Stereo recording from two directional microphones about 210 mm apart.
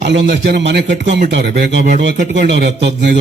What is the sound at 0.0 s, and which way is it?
A man's voice, 55° right (ahead or behind).